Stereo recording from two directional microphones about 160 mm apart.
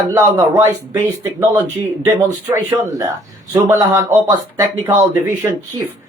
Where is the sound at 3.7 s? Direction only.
15° right (ahead or behind).